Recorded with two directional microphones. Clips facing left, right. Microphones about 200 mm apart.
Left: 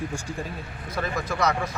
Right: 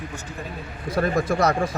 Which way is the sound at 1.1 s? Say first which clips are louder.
Right 3 dB; 55° right (ahead or behind).